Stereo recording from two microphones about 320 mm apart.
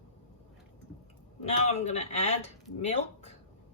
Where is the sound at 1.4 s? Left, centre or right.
Left.